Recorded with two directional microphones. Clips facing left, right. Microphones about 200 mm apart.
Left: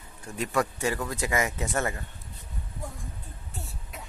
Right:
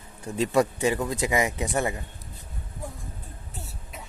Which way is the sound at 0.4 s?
25° right (ahead or behind).